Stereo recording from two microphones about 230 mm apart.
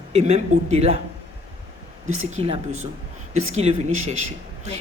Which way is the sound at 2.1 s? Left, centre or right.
Right.